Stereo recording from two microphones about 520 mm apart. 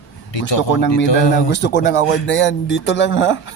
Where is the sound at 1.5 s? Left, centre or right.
Centre.